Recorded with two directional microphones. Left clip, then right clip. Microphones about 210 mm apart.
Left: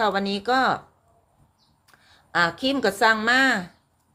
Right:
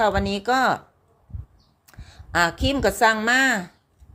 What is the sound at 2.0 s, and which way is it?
A woman's voice, 20° right (ahead or behind).